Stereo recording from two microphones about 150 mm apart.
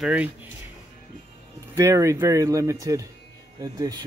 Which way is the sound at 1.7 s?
20° right (ahead or behind).